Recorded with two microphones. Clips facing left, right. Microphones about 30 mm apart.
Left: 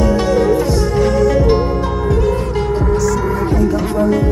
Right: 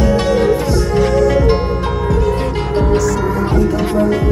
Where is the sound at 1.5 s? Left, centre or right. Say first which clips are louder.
Left 1 dB; right.